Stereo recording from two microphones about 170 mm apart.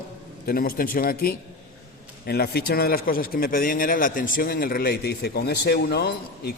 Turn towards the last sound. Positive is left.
turn(degrees=70)  # may be behind; listen again after turning